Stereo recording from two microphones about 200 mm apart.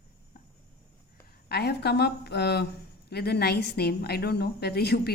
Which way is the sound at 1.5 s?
55° left (ahead or behind).